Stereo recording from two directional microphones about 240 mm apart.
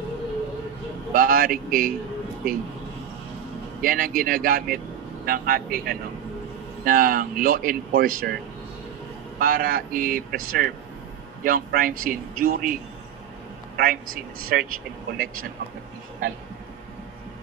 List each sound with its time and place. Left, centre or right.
1.1 s speech: right
3.8 s speech: right
9.4 s speech: right
13.7 s speech: right